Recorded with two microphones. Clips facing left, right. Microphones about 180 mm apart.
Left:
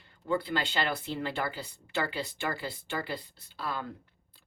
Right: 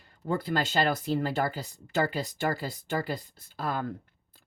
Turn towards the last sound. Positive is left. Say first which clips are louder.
# right 4 dB
turn(degrees=-45)  # may be behind; listen again after turning